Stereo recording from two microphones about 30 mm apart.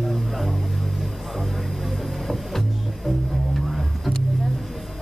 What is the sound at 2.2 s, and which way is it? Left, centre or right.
Music, centre.